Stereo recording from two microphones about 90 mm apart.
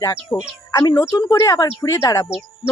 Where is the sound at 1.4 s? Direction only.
45° left (ahead or behind).